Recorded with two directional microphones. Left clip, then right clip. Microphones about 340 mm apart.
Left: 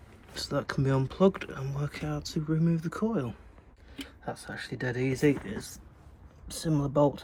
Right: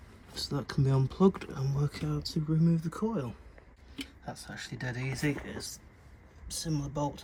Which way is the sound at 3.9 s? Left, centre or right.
Centre.